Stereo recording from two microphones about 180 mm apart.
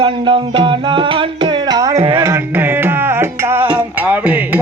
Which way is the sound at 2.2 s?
15° right (ahead or behind).